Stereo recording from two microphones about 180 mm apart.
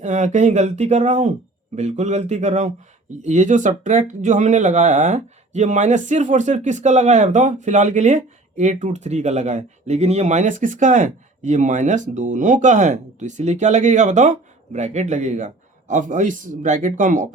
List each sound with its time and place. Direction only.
0.0 s speech: 40° right (ahead or behind)